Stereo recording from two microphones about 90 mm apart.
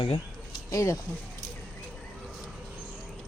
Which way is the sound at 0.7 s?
40° left (ahead or behind).